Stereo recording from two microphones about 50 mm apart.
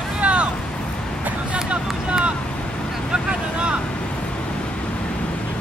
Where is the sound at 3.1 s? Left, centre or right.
Centre.